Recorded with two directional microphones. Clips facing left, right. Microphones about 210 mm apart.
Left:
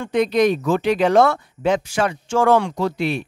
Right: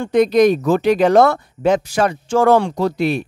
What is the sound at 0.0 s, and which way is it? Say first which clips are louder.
Speech: right 4 dB; 40° right (ahead or behind).